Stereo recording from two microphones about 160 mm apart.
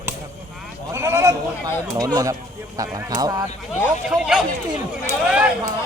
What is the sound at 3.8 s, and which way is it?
Speech, 5° right (ahead or behind).